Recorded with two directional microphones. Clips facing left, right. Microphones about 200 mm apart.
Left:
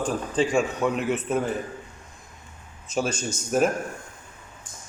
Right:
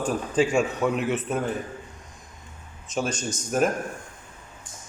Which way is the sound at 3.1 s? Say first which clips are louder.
Even; 30° left (ahead or behind).